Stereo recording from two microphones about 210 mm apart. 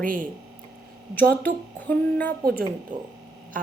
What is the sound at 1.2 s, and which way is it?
Speech, 10° left (ahead or behind).